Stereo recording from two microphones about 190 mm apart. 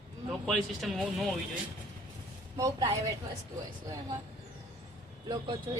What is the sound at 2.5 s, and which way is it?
Speech, 15° right (ahead or behind).